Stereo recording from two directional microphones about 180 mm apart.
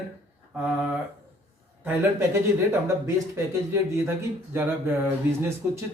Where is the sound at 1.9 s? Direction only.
15° right (ahead or behind).